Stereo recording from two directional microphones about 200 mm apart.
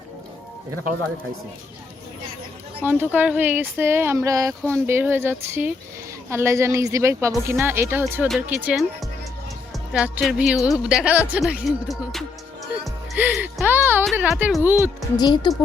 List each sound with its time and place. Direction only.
2.8 s speech: 10° right (ahead or behind)
15.1 s speech: 20° left (ahead or behind)